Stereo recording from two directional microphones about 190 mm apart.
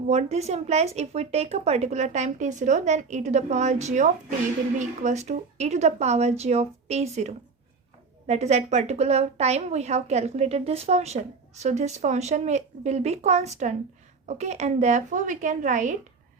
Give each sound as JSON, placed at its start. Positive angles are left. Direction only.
{"t": 0.1, "sound": "a woman's voice", "side_deg": -35}